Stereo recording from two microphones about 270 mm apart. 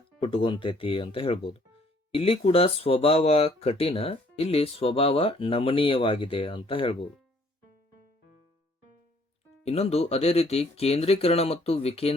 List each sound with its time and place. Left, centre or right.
0.2 s speech: centre
9.6 s speech: left